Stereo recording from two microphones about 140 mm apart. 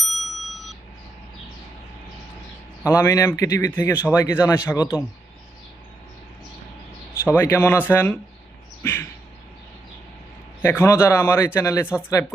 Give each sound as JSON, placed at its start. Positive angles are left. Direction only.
{"t": 0.0, "sound": "ding", "side_deg": 0}
{"t": 2.8, "sound": "a man's voice", "side_deg": 25}
{"t": 7.3, "sound": "a man's voice", "side_deg": 15}
{"t": 8.8, "sound": "a sound", "side_deg": 15}
{"t": 10.6, "sound": "a man's voice", "side_deg": 15}
{"t": 11.9, "sound": "speech", "side_deg": -10}